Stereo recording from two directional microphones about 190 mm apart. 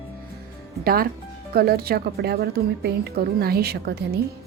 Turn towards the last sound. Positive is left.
turn(degrees=-55)  # may be behind; listen again after turning